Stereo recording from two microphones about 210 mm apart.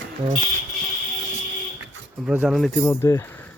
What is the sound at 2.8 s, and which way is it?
Speech, 15° left (ahead or behind).